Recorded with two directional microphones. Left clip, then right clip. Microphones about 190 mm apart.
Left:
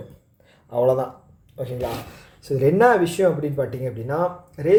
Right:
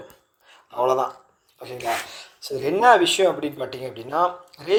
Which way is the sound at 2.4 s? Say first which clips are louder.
Left 1 dB; 20° right (ahead or behind).